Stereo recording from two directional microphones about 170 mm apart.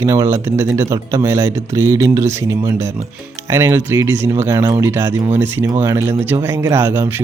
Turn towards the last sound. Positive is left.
turn(degrees=-15)  # may be behind; listen again after turning